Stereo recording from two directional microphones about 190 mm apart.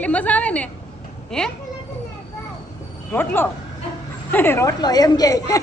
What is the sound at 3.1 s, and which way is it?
Speech, 10° left (ahead or behind).